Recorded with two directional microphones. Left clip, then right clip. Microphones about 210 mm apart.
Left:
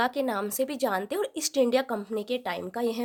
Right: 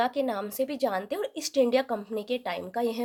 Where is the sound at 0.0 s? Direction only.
20° left (ahead or behind).